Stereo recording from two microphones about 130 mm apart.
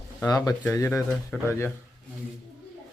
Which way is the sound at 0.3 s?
30° left (ahead or behind).